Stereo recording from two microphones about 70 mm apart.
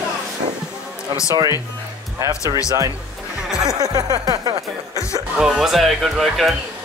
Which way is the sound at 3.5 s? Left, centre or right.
Centre.